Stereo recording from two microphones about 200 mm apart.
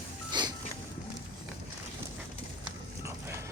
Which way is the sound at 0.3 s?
20° right (ahead or behind).